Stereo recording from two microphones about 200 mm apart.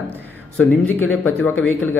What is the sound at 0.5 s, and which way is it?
Speech, 10° left (ahead or behind).